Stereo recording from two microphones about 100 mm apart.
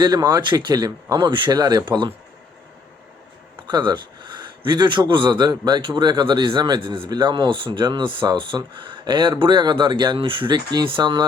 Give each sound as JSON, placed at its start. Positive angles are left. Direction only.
{"t": 0.0, "sound": "speech", "side_deg": -40}
{"t": 1.1, "sound": "speech", "side_deg": -50}
{"t": 1.5, "sound": "speech", "side_deg": -40}
{"t": 1.8, "sound": "speech", "side_deg": -55}
{"t": 3.7, "sound": "speech", "side_deg": -50}